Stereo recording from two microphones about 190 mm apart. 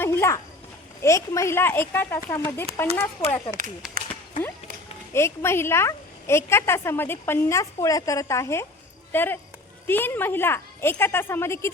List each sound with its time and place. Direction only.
0.0 s a sound: 15° left (ahead or behind)
1.0 s a woman's voice: 15° left (ahead or behind)
3.8 s speech: 5° right (ahead or behind)
5.1 s a woman's voice: 15° left (ahead or behind)